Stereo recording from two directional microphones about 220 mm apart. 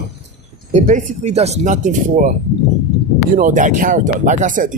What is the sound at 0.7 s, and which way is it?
Speech, 35° right (ahead or behind).